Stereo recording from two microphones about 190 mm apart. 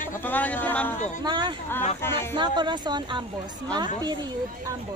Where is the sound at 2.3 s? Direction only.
25° right (ahead or behind).